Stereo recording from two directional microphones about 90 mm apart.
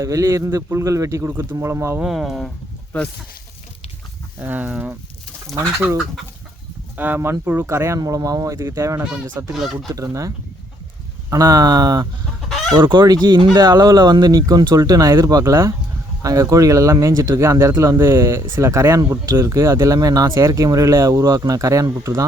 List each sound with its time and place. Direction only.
0.0 s speech: 35° right (ahead or behind)
2.0 s speech: 5° right (ahead or behind)
2.9 s speech: 15° left (ahead or behind)
4.4 s speech: 20° right (ahead or behind)
6.9 s speech: 20° right (ahead or behind)
9.6 s speech: centre (ahead or behind)
9.9 s speech: 35° right (ahead or behind)
12.5 s fowl: centre (ahead or behind)
12.7 s speech: 55° right (ahead or behind); by 22.3 s 35° right (ahead or behind)